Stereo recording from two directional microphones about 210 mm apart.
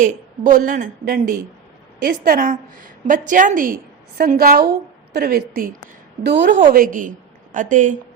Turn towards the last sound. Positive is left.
turn(degrees=-35)  # may be behind; listen again after turning